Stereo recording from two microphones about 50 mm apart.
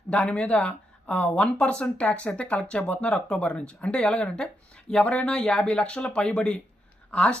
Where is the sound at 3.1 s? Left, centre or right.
Centre.